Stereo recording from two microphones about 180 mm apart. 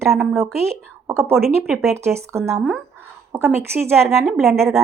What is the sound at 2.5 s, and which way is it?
Speech, 5° right (ahead or behind).